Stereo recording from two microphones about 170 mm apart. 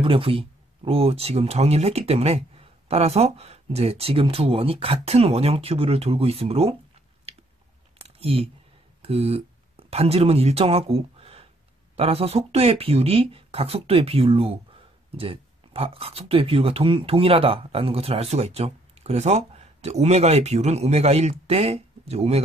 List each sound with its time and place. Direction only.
0.0 s speech: 30° right (ahead or behind)
7.3 s chewing: 35° right (ahead or behind)
8.0 s a sound: 35° right (ahead or behind)
9.0 s speech: 35° right (ahead or behind)